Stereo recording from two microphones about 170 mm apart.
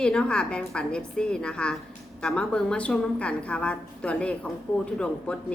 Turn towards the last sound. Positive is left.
turn(degrees=5)  # may be behind; listen again after turning